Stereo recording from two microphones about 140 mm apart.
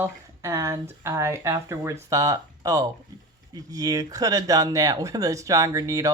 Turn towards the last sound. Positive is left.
turn(degrees=-25)  # may be behind; listen again after turning